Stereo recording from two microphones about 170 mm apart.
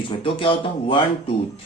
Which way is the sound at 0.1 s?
30° left (ahead or behind).